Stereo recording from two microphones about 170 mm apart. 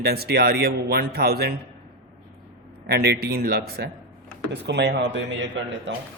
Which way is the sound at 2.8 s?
75° right (ahead or behind).